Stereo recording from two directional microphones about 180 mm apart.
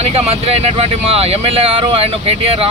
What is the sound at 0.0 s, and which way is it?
Speech, 35° right (ahead or behind).